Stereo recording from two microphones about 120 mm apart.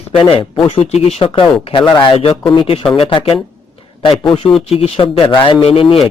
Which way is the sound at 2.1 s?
50° left (ahead or behind).